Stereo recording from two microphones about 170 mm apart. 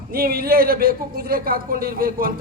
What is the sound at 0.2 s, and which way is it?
Speech, 60° right (ahead or behind).